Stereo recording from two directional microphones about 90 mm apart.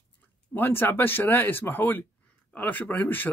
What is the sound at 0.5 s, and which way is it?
A man's voice, 20° left (ahead or behind).